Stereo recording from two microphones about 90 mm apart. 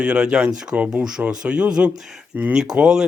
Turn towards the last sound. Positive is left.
turn(degrees=-5)  # may be behind; listen again after turning